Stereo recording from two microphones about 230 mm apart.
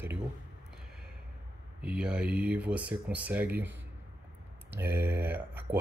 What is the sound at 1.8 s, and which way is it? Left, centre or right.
Speech, centre.